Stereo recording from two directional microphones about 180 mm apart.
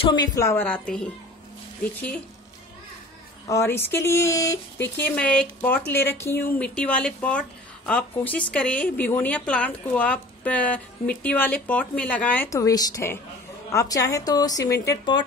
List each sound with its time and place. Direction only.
0.0 s speech: 25° left (ahead or behind); by 1.0 s 5° left (ahead or behind)
3.4 s a woman's voice: 15° left (ahead or behind)